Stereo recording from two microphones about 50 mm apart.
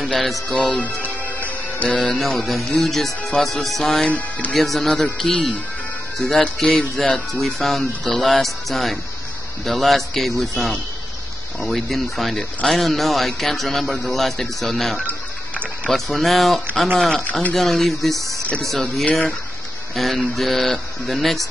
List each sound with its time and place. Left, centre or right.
0.0 s speech: centre
0.6 s speech: centre
0.8 s music: left
1.9 s speech: centre
11.6 s speech: centre
15.0 s music: left
15.9 s speech: centre
17.2 s speech: left
17.6 s speech: centre